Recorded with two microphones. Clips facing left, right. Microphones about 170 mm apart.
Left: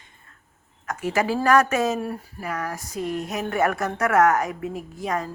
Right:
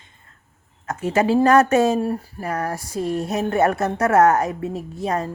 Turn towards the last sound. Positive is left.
turn(degrees=-30)  # may be behind; listen again after turning